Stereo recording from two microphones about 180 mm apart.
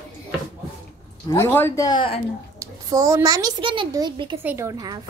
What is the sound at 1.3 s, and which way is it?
Speech, 15° left (ahead or behind).